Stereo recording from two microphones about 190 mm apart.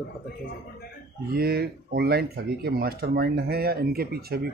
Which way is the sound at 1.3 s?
55° right (ahead or behind).